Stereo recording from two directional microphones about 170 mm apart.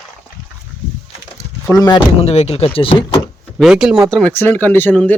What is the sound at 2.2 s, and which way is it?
Speech, 40° left (ahead or behind).